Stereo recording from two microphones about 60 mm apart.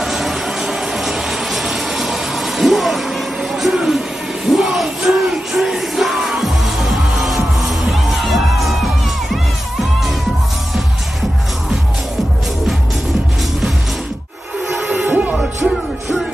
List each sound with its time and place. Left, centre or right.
0.0 s a sound: centre
4.5 s yell: centre
9.3 s music: centre
14.9 s music: right